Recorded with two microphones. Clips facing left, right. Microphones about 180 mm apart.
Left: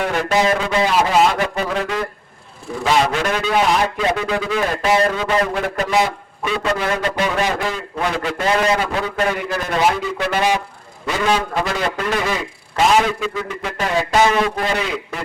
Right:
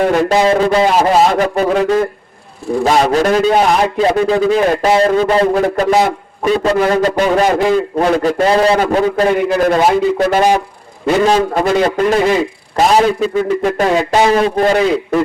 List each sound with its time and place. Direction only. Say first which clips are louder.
0.0 s a man's voice: right 6 dB; 30° right (ahead or behind); by 13.8 s 50° right (ahead or behind)
14.3 s a man's voice: right 7 dB; 35° right (ahead or behind)